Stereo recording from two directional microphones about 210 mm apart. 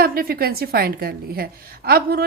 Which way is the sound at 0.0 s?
45° right (ahead or behind).